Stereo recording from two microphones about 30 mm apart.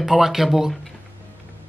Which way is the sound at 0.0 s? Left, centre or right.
Centre.